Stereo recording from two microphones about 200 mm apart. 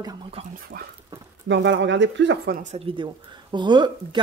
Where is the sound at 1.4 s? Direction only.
65° right (ahead or behind).